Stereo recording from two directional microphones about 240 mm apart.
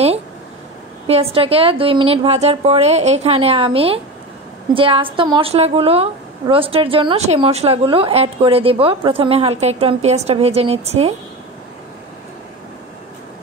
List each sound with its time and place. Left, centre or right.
1.0 s a woman's voice: right